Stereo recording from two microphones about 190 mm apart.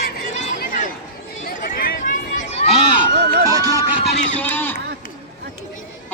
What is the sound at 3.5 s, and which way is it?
Run, 20° right (ahead or behind).